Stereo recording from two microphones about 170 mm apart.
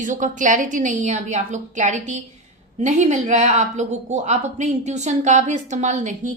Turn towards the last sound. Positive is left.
turn(degrees=-45)  # may be behind; listen again after turning